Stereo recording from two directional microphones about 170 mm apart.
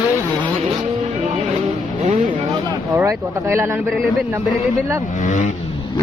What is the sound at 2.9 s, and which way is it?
Speech, 15° right (ahead or behind).